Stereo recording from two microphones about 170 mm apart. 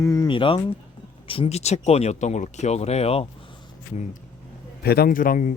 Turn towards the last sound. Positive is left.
turn(degrees=50)  # may be behind; listen again after turning